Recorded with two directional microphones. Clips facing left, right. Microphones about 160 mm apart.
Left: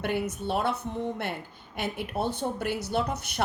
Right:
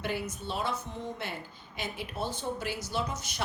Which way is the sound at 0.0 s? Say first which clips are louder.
Left 5 dB; 60° left (ahead or behind).